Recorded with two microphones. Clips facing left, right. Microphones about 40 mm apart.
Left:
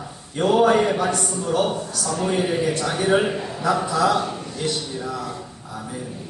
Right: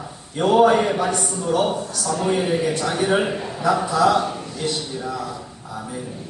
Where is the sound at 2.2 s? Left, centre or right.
Centre.